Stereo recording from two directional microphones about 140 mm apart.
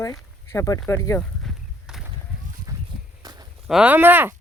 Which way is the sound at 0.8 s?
20° left (ahead or behind).